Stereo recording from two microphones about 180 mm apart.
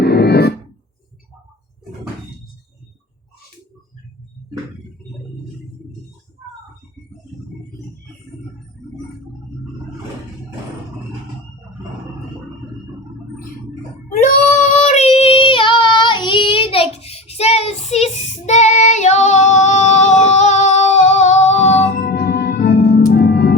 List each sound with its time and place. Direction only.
0.0 s music: 65° left (ahead or behind)
14.8 s child singing: 35° left (ahead or behind)
21.9 s music: 60° left (ahead or behind)